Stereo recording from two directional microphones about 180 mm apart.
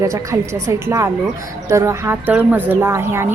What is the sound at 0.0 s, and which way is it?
A woman's voice, 15° right (ahead or behind).